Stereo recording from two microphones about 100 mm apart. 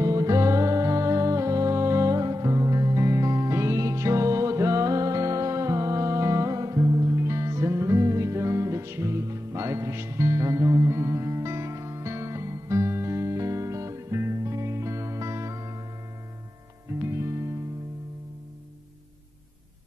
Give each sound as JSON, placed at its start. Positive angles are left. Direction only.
{"t": 0.0, "sound": "music", "side_deg": -35}
{"t": 17.1, "sound": "music", "side_deg": -30}